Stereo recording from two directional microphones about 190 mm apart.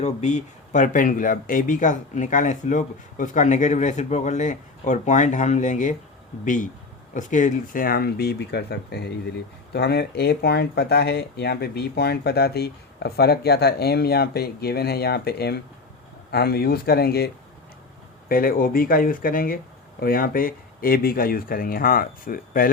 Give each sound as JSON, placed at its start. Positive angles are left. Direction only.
{"t": 0.0, "sound": "speech", "side_deg": 40}